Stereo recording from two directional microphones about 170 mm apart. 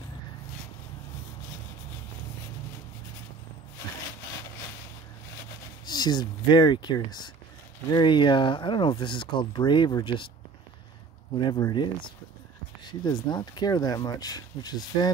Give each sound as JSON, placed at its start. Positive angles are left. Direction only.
{"t": 5.9, "sound": "speech", "side_deg": 25}
{"t": 11.3, "sound": "speech", "side_deg": 25}